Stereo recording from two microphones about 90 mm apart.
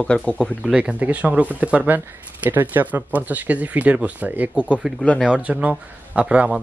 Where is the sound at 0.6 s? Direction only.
10° right (ahead or behind).